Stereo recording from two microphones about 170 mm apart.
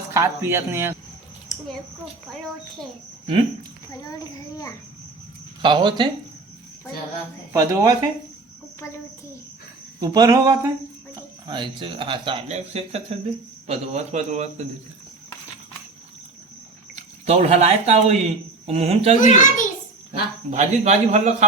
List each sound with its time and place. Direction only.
0.1 s speech: 15° right (ahead or behind)
4.2 s a child's voice: 20° left (ahead or behind)
5.6 s speech: 25° right (ahead or behind)
7.5 s speech: 20° right (ahead or behind)
10.0 s speech: 20° right (ahead or behind)
12.5 s speech: 40° right (ahead or behind)
16.9 s speech: 40° right (ahead or behind)
19.2 s a child's voice: 50° left (ahead or behind)
20.5 s a man's voice: 45° right (ahead or behind)